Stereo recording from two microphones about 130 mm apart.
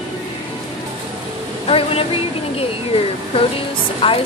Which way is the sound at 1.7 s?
45° left (ahead or behind).